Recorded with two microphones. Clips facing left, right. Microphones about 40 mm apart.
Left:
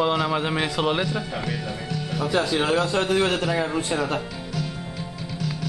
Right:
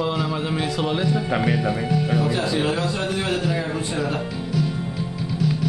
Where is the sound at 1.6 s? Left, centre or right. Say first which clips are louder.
Right 8 dB; right.